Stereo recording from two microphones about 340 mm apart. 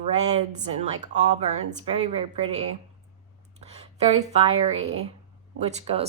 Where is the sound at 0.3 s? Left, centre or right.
Centre.